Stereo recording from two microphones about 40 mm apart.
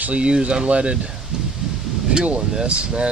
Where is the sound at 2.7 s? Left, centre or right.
Right.